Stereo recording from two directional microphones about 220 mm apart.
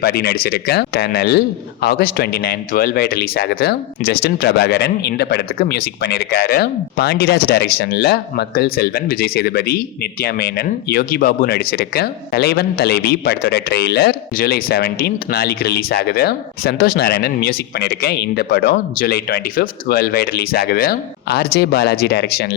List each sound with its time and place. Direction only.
0.0 s a man's voice: 45° left (ahead or behind)